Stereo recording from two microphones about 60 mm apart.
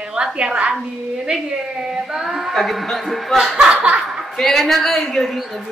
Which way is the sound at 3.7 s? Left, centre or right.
Right.